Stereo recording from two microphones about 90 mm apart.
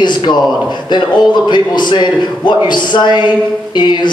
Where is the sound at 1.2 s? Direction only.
55° left (ahead or behind).